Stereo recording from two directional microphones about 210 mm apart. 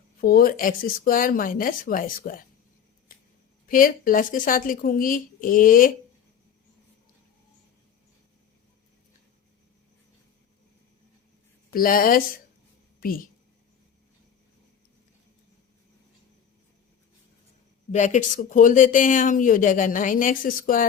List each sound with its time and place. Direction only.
0.2 s speech: 45° left (ahead or behind)
3.7 s speech: 40° left (ahead or behind)
11.7 s a woman's voice: 40° left (ahead or behind)
17.9 s speech: 35° left (ahead or behind)